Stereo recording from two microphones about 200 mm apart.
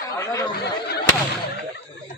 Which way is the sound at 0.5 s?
55° left (ahead or behind).